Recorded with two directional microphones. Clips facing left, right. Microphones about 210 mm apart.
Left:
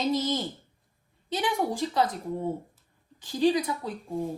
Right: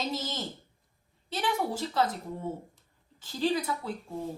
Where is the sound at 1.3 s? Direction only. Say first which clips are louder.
Left 3 dB; 15° left (ahead or behind).